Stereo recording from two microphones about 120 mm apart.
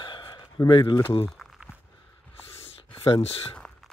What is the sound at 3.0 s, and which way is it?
Speech, 50° left (ahead or behind).